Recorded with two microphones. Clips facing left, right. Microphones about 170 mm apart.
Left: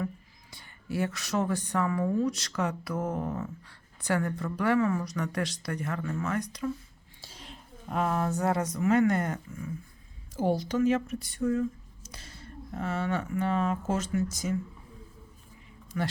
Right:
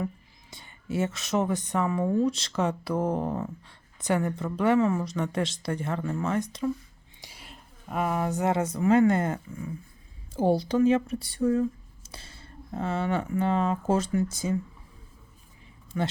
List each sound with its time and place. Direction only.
0.5 s speech: 20° right (ahead or behind)
7.2 s speech: 10° right (ahead or behind); by 14.6 s 30° right (ahead or behind)
15.9 s speech: 25° right (ahead or behind)